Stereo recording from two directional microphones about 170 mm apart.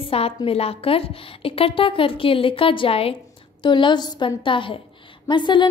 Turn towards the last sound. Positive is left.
turn(degrees=25)  # may be behind; listen again after turning